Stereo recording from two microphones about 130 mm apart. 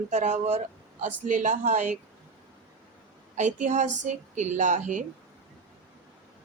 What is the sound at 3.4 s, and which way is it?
A woman's voice, 70° right (ahead or behind).